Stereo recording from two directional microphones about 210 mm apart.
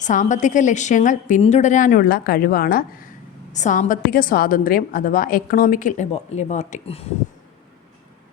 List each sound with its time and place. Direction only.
0.0 s a woman's voice: 35° left (ahead or behind)